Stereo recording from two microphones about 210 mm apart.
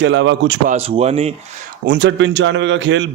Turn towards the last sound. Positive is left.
turn(degrees=-60)  # may be behind; listen again after turning